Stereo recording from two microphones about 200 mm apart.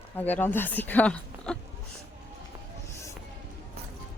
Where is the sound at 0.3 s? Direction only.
10° left (ahead or behind).